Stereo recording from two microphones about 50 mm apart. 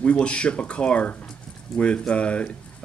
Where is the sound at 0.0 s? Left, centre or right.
Left.